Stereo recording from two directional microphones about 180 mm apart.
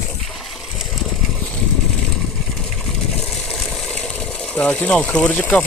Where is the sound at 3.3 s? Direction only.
Centre (ahead or behind).